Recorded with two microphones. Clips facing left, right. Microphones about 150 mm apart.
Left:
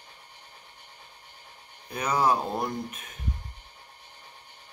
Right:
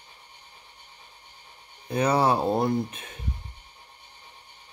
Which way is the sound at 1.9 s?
30° right (ahead or behind).